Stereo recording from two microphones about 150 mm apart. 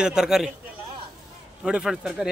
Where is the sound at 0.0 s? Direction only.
5° right (ahead or behind).